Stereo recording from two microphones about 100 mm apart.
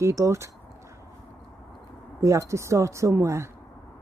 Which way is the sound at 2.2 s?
30° right (ahead or behind).